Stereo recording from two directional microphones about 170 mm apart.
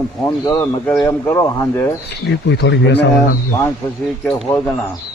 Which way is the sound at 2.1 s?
75° left (ahead or behind).